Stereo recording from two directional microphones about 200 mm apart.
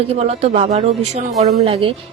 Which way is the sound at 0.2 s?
30° right (ahead or behind).